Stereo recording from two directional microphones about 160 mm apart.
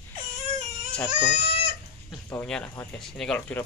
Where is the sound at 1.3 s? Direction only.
90° right.